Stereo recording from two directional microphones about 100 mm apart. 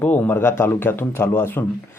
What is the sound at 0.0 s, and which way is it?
Speech, 20° left (ahead or behind).